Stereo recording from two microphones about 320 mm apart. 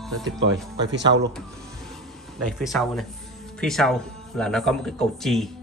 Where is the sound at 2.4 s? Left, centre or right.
Centre.